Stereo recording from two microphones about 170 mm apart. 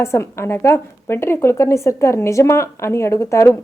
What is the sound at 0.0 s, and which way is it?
Speech, 15° left (ahead or behind).